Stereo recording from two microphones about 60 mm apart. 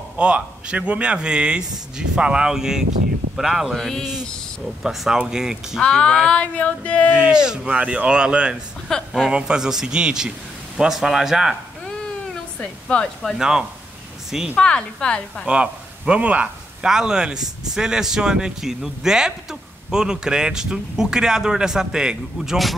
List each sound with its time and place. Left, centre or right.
0.2 s speech: centre
3.7 s speech: centre
4.8 s speech: centre
5.8 s female singing: centre
7.1 s speech: centre
8.9 s a woman's voice: centre
9.3 s speech: centre
11.8 s cat: centre
13.4 s speech: centre
14.6 s a woman's voice: centre
15.4 s speech: centre
16.8 s speech: centre